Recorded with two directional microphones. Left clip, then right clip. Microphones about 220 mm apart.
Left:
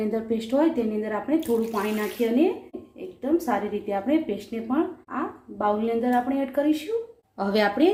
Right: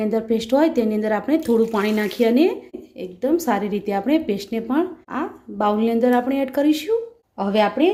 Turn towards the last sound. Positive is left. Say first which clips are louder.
# right 3 dB
turn(degrees=-15)  # may be behind; listen again after turning